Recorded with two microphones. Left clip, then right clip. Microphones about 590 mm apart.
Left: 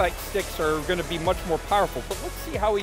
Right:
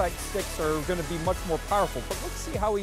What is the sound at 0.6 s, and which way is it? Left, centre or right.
Speech, right.